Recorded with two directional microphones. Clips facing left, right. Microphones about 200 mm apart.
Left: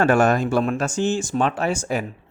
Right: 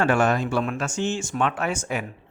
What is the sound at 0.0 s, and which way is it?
Speech, 40° left (ahead or behind).